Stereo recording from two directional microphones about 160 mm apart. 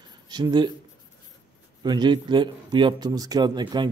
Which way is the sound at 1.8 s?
25° right (ahead or behind).